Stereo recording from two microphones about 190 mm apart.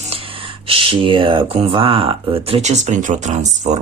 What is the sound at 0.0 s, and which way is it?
Speech, 30° right (ahead or behind).